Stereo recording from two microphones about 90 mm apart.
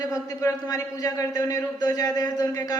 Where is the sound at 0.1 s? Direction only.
40° left (ahead or behind).